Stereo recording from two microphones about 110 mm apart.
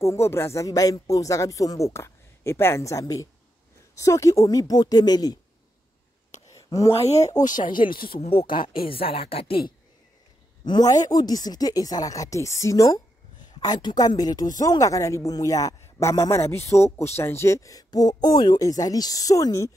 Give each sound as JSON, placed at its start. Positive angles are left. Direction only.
{"t": 0.0, "sound": "speech", "side_deg": 25}
{"t": 6.5, "sound": "speech", "side_deg": 30}
{"t": 7.1, "sound": "speech", "side_deg": 90}
{"t": 7.8, "sound": "speech", "side_deg": 65}
{"t": 10.6, "sound": "speech", "side_deg": 40}